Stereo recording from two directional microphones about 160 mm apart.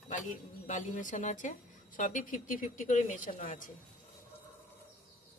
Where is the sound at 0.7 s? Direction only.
55° left (ahead or behind).